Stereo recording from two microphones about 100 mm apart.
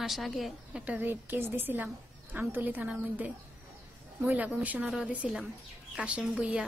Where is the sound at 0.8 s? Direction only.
15° right (ahead or behind).